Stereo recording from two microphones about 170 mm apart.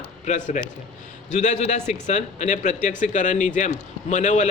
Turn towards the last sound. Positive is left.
turn(degrees=45)  # may be behind; listen again after turning